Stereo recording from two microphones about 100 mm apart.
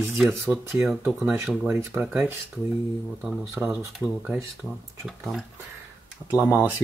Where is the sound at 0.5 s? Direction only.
20° right (ahead or behind).